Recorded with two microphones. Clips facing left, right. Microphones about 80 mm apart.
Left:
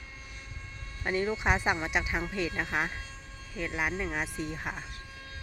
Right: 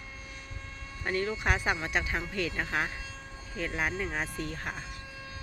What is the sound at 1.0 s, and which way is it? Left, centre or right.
Speech, centre.